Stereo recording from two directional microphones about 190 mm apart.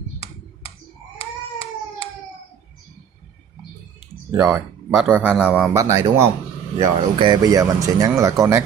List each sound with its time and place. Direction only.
4.3 s speech: 10° right (ahead or behind)
5.7 s speech: 15° right (ahead or behind)